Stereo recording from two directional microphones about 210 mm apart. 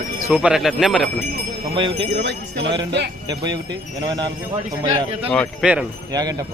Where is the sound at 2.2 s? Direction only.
60° right (ahead or behind).